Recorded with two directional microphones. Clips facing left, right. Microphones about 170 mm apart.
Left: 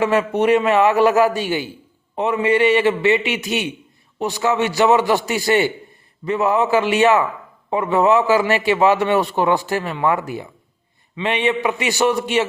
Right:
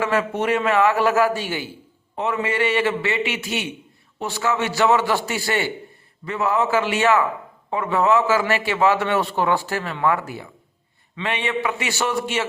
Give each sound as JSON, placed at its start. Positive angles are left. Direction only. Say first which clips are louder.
{"t": 0.0, "sound": "a man's voice", "louder": "left 5 dB", "side_deg": 20}